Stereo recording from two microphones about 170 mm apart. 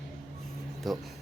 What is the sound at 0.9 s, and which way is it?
Speech, centre (ahead or behind).